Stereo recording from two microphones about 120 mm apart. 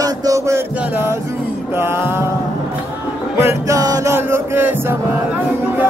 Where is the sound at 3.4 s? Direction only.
25° right (ahead or behind).